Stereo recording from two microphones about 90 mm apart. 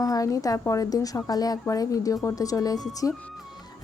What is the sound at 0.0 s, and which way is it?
Speech, 40° left (ahead or behind).